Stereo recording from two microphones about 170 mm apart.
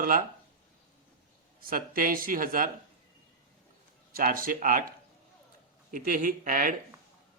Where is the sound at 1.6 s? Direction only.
55° right (ahead or behind).